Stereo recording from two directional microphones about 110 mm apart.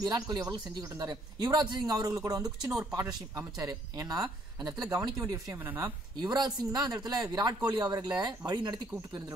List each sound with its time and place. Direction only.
0.0 s speech: 35° right (ahead or behind)
6.2 s speech: 40° right (ahead or behind)